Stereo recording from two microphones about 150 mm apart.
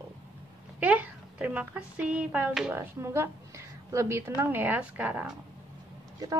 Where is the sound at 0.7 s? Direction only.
10° right (ahead or behind).